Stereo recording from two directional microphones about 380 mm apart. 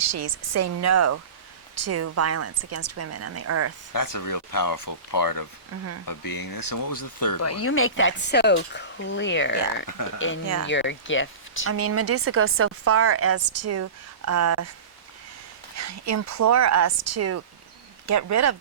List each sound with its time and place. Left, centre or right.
0.0 s speech: right
3.9 s speech: left
5.7 s speech: right
6.1 s speech: left
11.7 s speech: right
15.7 s speech: right